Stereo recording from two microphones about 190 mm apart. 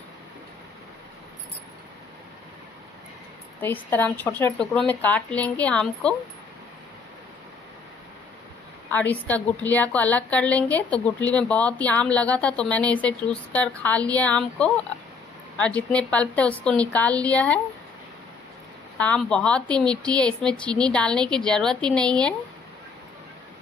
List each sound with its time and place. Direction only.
3.6 s a woman's voice: 10° left (ahead or behind)
8.9 s a woman's voice: 10° left (ahead or behind)
18.9 s a woman's voice: 5° left (ahead or behind)